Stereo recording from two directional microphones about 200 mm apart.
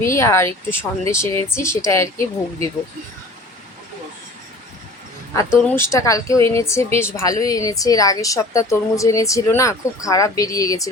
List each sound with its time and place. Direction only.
0.0 s speech: 15° left (ahead or behind)
5.6 s speech: 10° left (ahead or behind)